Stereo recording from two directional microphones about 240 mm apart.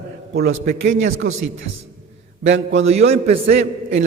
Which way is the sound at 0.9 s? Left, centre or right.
Right.